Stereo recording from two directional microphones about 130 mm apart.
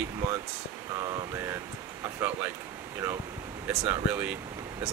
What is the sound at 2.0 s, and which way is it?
Speech, 15° right (ahead or behind).